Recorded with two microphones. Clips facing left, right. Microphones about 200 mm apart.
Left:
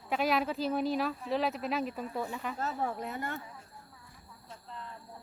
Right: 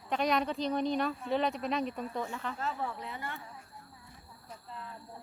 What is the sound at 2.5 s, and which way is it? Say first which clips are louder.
Speech: left 5 dB; 40° left (ahead or behind).